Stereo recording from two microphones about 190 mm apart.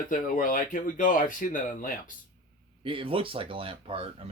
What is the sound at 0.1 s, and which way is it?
Speech, 45° left (ahead or behind).